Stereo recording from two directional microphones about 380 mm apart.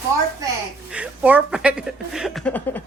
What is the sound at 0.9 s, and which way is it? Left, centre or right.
A woman's voice, centre.